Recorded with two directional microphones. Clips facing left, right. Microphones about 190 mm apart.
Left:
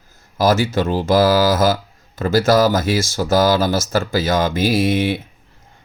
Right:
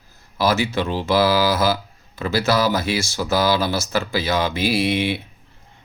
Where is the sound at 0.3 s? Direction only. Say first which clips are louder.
Left 4 dB; 45° left (ahead or behind).